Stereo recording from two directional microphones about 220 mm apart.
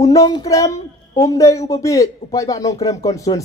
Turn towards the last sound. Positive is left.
turn(degrees=15)  # may be behind; listen again after turning